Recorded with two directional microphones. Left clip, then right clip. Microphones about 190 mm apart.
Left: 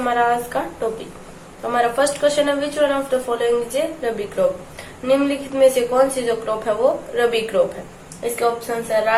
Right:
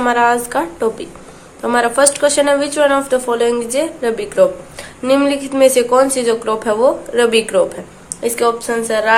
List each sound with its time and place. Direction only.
0.0 s speech: 50° right (ahead or behind)